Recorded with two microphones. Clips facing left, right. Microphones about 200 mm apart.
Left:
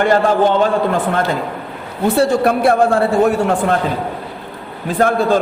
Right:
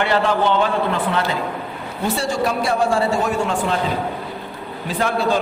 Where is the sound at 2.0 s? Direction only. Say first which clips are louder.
Left 8 dB; 60° left (ahead or behind).